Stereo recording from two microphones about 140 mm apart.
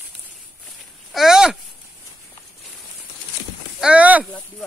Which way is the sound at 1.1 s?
5° right (ahead or behind).